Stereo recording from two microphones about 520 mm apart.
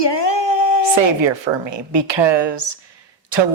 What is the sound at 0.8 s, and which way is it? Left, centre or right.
Speech, right.